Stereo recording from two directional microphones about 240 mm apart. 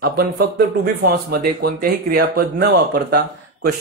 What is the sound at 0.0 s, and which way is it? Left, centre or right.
Speech, right.